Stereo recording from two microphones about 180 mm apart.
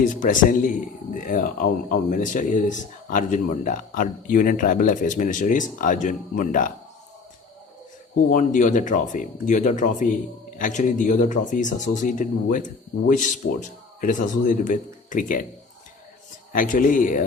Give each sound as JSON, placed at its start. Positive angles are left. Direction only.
{"t": 0.2, "sound": "speech", "side_deg": 45}
{"t": 8.3, "sound": "speech", "side_deg": 45}
{"t": 16.5, "sound": "speech", "side_deg": 50}